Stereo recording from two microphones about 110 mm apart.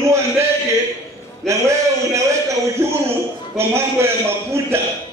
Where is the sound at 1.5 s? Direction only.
25° right (ahead or behind).